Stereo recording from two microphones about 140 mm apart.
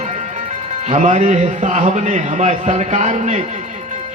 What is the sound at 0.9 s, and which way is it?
A man's voice, 60° right (ahead or behind).